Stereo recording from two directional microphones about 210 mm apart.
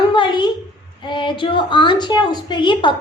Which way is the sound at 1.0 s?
25° left (ahead or behind).